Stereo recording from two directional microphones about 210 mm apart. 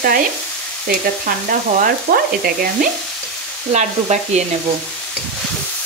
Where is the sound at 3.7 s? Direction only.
35° right (ahead or behind).